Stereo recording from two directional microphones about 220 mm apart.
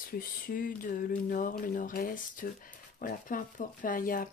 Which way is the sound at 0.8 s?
40° left (ahead or behind).